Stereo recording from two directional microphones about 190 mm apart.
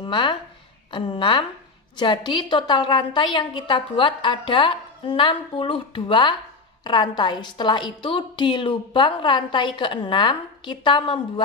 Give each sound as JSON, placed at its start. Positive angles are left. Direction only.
{"t": 0.0, "sound": "a woman's voice", "side_deg": 25}